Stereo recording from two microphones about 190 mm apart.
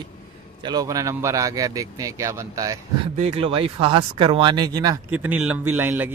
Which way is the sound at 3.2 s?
30° right (ahead or behind).